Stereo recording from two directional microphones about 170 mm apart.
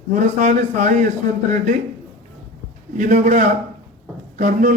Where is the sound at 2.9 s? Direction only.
50° right (ahead or behind).